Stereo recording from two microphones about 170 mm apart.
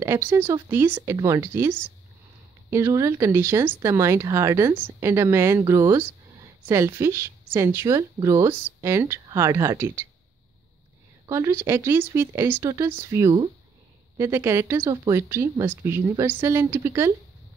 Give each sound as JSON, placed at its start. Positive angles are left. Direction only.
{"t": 0.0, "sound": "speech", "side_deg": -15}
{"t": 11.2, "sound": "speech", "side_deg": -15}